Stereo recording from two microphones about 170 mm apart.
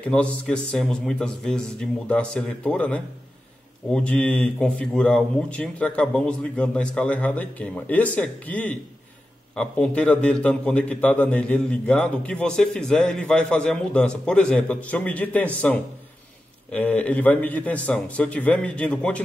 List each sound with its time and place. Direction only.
0.0 s a man's voice: 5° left (ahead or behind)